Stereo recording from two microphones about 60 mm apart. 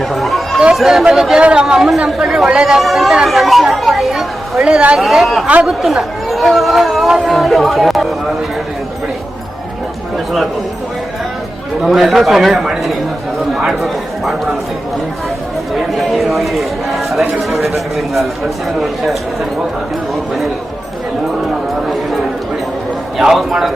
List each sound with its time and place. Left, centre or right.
0.0 s chatter: centre
0.7 s a man's voice: centre
1.6 s a man's voice: centre
3.2 s chatter: centre
4.6 s a woman's voice: centre
4.9 s speech: centre
11.8 s speech: centre
15.7 s speech: centre
23.1 s speech: centre